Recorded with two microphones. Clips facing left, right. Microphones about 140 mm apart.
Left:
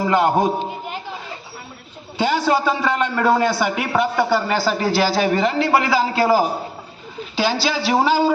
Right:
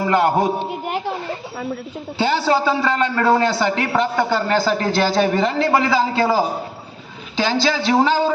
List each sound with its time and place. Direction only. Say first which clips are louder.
0.1 s a man's voice: right 1 dB; 15° left (ahead or behind)
2.2 s a man's voice: even; 15° left (ahead or behind)